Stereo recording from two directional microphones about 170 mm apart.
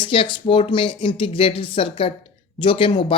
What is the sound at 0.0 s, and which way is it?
Speech, 30° left (ahead or behind).